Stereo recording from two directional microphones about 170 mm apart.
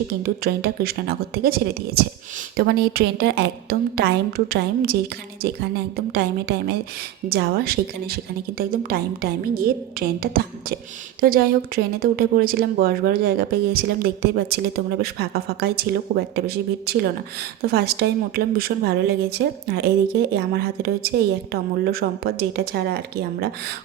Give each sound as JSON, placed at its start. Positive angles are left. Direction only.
{"t": 0.2, "sound": "speech", "side_deg": -65}
{"t": 6.1, "sound": "speech", "side_deg": -70}